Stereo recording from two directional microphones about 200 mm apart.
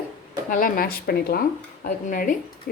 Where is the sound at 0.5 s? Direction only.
45° left (ahead or behind).